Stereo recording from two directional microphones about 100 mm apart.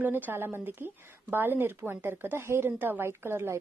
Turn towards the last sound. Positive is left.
turn(degrees=-25)  # may be behind; listen again after turning